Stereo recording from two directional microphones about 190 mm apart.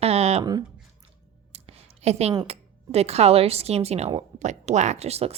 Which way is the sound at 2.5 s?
35° right (ahead or behind).